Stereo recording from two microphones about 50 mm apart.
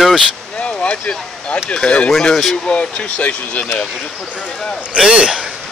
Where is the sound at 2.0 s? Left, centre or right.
Centre; by 3.7 s left.